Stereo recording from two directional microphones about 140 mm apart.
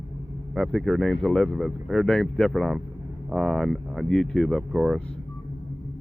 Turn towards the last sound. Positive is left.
turn(degrees=0)  # may be behind; listen again after turning